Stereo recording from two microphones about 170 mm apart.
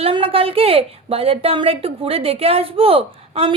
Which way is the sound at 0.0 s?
35° right (ahead or behind).